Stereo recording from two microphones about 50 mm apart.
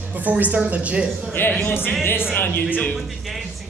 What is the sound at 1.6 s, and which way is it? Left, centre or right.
A woman's voice, left.